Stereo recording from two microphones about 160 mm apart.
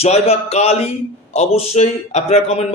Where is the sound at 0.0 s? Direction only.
40° left (ahead or behind).